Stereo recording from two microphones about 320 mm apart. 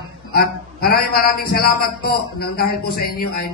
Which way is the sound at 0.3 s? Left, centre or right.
Left.